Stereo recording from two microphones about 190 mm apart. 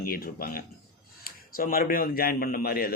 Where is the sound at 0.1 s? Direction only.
50° left (ahead or behind).